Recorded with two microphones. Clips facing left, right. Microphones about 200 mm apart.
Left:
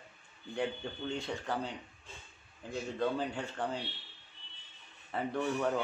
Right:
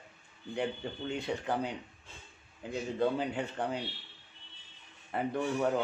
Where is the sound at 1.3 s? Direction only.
5° right (ahead or behind).